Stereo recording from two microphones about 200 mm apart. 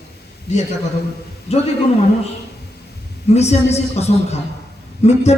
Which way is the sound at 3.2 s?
35° left (ahead or behind).